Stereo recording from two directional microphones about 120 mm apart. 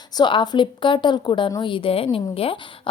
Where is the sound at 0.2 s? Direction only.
40° left (ahead or behind).